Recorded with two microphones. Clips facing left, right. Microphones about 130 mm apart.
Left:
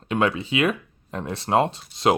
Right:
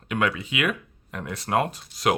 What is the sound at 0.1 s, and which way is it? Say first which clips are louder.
Speech: left 4 dB; 30° left (ahead or behind).